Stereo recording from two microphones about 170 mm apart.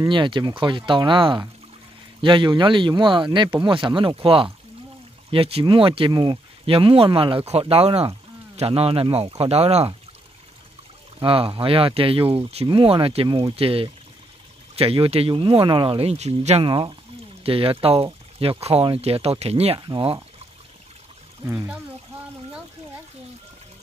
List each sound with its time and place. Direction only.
0.0 s speech: 30° right (ahead or behind)
11.1 s speech: 30° right (ahead or behind)